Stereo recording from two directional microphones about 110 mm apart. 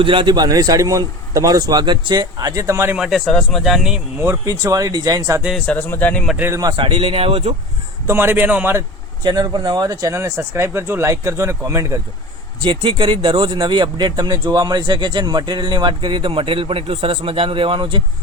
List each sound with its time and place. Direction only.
0.0 s a man's voice: 50° right (ahead or behind); by 2.9 s 25° right (ahead or behind)
2.9 s speech: 5° right (ahead or behind)
4.2 s a man's voice: 25° right (ahead or behind)
5.5 s speech: 10° left (ahead or behind)
6.3 s speech: 20° right (ahead or behind)
6.7 s speech: 55° right (ahead or behind)
8.0 s speech: 20° right (ahead or behind)
9.2 s a man's voice: 40° right (ahead or behind)
10.2 s speech: 25° right (ahead or behind)
12.6 s speech: 50° right (ahead or behind)